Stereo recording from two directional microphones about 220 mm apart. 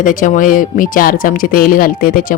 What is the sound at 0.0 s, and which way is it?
Speech, 35° left (ahead or behind).